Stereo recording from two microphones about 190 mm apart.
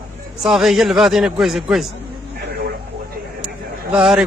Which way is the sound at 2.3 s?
55° right (ahead or behind).